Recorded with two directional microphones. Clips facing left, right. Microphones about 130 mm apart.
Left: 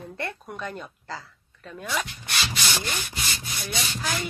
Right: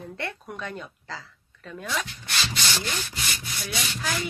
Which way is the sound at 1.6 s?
5° left (ahead or behind).